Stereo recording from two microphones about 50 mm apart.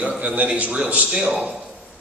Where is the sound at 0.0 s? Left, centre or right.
Right.